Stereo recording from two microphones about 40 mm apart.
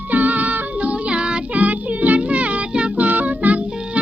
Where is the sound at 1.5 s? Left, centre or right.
Right.